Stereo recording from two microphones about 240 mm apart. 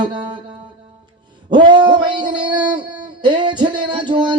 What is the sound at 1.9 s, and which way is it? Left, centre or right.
Music, centre.